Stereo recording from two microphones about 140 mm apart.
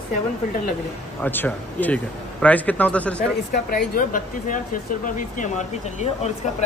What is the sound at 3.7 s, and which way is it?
Speech, 85° left.